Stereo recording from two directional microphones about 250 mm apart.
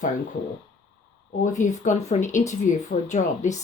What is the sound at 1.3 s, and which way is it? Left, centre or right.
Speech, left.